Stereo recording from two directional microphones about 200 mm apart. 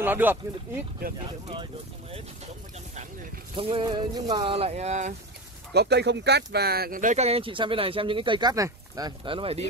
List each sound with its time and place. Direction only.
0.0 s speech: 10° right (ahead or behind)
3.5 s speech: 25° right (ahead or behind)
5.7 s speech: 55° right (ahead or behind); by 9.7 s 30° right (ahead or behind)